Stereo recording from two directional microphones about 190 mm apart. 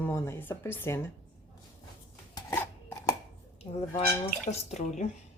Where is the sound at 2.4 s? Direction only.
15° left (ahead or behind).